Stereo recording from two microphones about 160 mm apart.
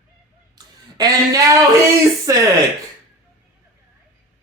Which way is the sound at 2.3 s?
20° right (ahead or behind).